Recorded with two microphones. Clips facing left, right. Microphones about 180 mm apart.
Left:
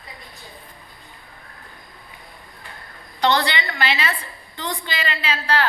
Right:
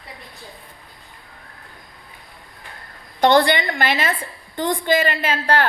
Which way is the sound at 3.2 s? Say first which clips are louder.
Right 5 dB; 50° right (ahead or behind).